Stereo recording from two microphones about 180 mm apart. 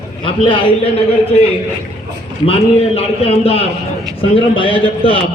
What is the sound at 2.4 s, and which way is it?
A man's voice, 35° left (ahead or behind).